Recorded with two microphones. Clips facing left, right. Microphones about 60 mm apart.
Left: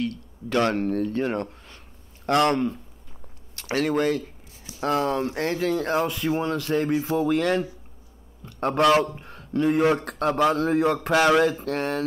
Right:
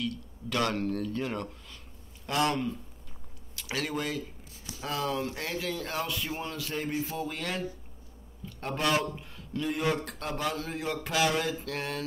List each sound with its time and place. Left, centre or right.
0.0 s speech: left
2.2 s speech: left
5.9 s a man's voice: left
11.5 s a man's voice: left